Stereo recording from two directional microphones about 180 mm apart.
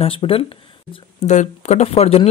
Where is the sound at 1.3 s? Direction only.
40° left (ahead or behind).